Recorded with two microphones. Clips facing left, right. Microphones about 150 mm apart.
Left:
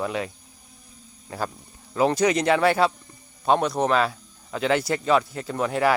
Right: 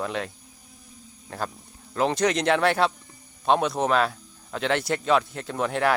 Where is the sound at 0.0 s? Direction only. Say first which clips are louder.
Left 2 dB; 5° left (ahead or behind).